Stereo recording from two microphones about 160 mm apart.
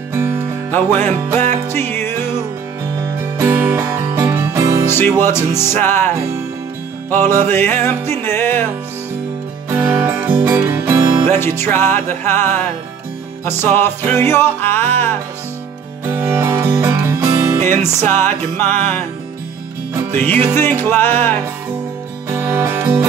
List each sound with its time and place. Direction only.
0.1 s music: 15° right (ahead or behind)
0.7 s music: 10° left (ahead or behind)
3.2 s music: 15° right (ahead or behind)
4.8 s music: 15° left (ahead or behind)
9.7 s music: 15° right (ahead or behind)
11.2 s music: 15° left (ahead or behind)
14.0 s music: 15° left (ahead or behind)
16.1 s music: 15° right (ahead or behind)
17.6 s music: 50° right (ahead or behind)
17.8 s music: 15° left (ahead or behind)
20.5 s music: 15° left (ahead or behind)
22.3 s music: 15° right (ahead or behind)